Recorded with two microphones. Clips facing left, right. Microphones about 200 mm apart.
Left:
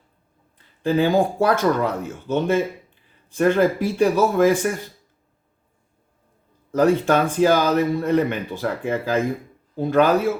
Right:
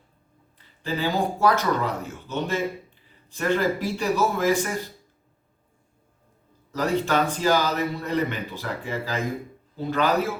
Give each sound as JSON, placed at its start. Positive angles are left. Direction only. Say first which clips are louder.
{"t": 0.8, "sound": "speech", "louder": "left 7 dB", "side_deg": 55}
{"t": 6.7, "sound": "speech", "louder": "left 7 dB", "side_deg": 55}